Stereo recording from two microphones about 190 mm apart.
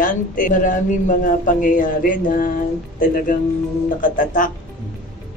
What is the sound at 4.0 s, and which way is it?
Speech, 45° left (ahead or behind).